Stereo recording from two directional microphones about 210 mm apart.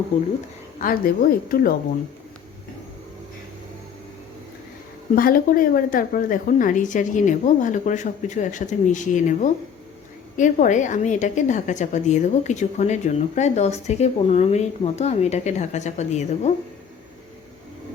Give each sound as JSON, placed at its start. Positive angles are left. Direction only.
{"t": 0.8, "sound": "a woman's voice", "side_deg": 45}
{"t": 5.1, "sound": "a woman's voice", "side_deg": 45}